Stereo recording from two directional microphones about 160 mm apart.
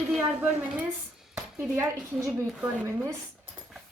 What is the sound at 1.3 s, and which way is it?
A woman's voice, 10° right (ahead or behind).